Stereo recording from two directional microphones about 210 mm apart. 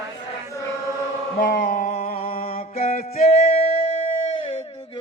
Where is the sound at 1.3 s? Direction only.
45° left (ahead or behind).